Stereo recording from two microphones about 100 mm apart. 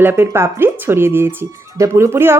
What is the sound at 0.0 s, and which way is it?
Speech, 25° right (ahead or behind).